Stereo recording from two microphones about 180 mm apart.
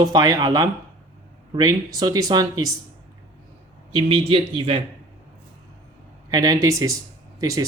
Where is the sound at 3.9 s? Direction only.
30° right (ahead or behind).